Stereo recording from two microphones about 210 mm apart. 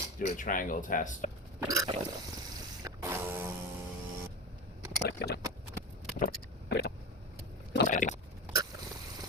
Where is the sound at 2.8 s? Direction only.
15° right (ahead or behind).